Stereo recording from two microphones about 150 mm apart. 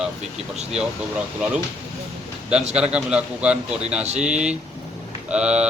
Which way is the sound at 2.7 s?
5° right (ahead or behind).